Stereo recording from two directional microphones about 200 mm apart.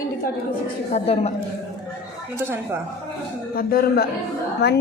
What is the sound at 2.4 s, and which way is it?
Speech, 10° right (ahead or behind).